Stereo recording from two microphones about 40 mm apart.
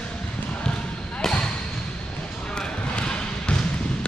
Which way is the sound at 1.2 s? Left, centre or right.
Centre.